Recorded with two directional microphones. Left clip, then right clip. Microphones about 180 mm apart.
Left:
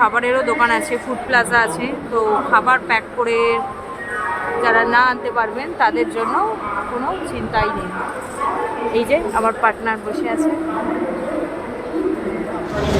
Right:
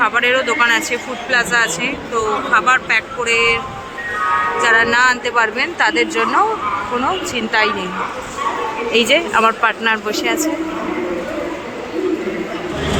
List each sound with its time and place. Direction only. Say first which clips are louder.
0.0 s speech: right 1 dB; 15° left (ahead or behind)
4.6 s a woman's voice: right 1 dB; 10° left (ahead or behind)
8.9 s a woman's voice: right 4 dB; centre (ahead or behind)